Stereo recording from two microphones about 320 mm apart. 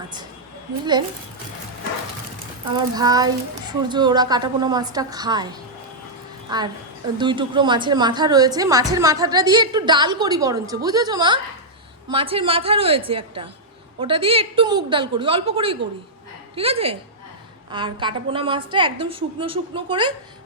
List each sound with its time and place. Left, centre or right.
2.7 s a woman's voice: centre